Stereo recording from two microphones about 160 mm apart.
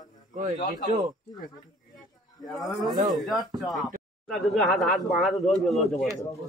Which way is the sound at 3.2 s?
Centre (ahead or behind).